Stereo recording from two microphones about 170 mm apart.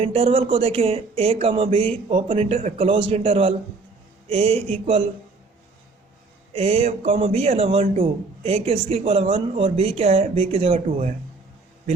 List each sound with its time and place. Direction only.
0.0 s speech: 35° right (ahead or behind)
6.5 s speech: 35° right (ahead or behind)